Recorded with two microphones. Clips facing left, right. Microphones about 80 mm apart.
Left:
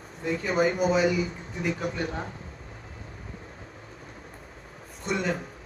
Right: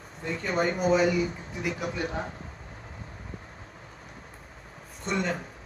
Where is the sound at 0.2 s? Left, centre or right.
Centre.